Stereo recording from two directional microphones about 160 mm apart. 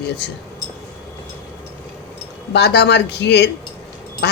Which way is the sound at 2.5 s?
90° left.